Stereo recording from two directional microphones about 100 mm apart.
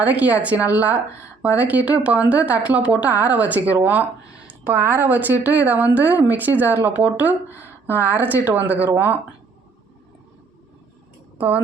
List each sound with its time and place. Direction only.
0.0 s speech: 15° right (ahead or behind)
11.3 s speech: 15° right (ahead or behind)